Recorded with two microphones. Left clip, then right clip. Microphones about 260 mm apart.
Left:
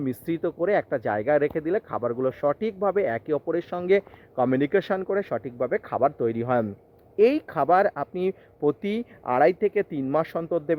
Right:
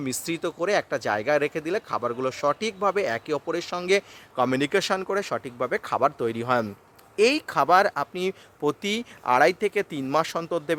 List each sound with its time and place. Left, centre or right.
0.0 s speech: centre